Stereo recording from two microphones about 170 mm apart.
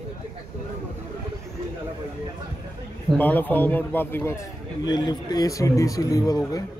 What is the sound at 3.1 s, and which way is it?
A man's voice, 10° left (ahead or behind).